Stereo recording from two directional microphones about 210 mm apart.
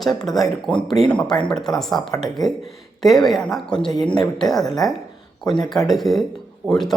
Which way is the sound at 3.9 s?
20° left (ahead or behind).